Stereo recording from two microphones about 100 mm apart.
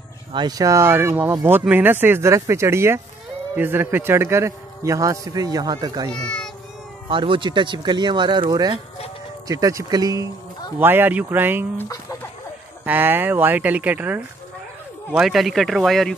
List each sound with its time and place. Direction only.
0.3 s a man's voice: 45° right (ahead or behind)
6.2 s speech: 10° left (ahead or behind)
7.1 s a man's voice: 55° right (ahead or behind); by 10.2 s 40° right (ahead or behind)
10.8 s speech: 20° right (ahead or behind)
12.8 s speech: 20° right (ahead or behind)
15.1 s speech: centre (ahead or behind)